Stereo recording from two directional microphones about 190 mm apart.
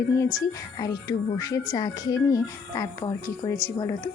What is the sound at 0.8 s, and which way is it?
A woman's voice, 20° left (ahead or behind).